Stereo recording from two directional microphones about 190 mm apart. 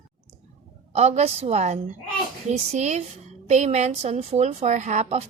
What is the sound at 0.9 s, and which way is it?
A woman's voice, 35° right (ahead or behind).